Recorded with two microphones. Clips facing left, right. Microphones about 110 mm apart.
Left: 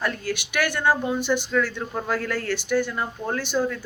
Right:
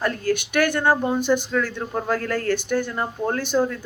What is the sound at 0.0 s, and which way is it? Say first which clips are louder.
Speech: right 5 dB; 45° right (ahead or behind).